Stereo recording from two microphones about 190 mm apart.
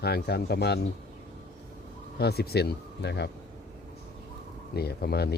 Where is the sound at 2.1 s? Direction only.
55° left (ahead or behind).